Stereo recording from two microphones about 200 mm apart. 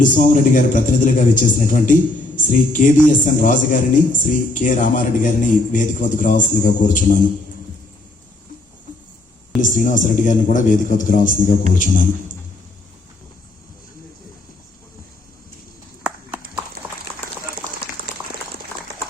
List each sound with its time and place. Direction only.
0.0 s a man's voice: 40° left (ahead or behind)
9.6 s a man's voice: 40° left (ahead or behind)
16.8 s run: 10° right (ahead or behind)